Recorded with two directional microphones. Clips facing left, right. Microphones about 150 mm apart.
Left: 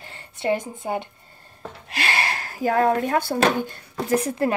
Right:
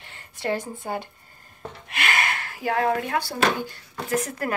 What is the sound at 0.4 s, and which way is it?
Speech, 20° left (ahead or behind).